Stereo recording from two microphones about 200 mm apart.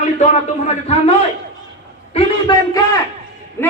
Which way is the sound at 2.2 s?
30° left (ahead or behind).